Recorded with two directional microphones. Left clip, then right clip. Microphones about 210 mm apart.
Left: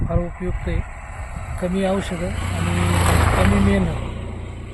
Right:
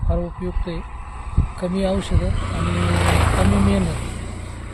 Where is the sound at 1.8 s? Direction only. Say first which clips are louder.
Left 1 dB; 10° right (ahead or behind).